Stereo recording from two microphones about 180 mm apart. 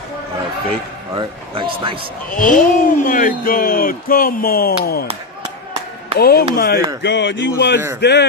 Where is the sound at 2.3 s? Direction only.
50° left (ahead or behind).